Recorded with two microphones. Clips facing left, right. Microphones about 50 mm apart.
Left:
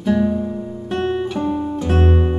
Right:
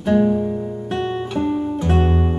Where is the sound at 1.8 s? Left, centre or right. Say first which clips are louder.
Left 1 dB; centre.